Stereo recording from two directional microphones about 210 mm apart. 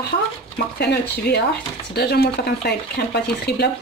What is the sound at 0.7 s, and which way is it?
Speech, 50° left (ahead or behind).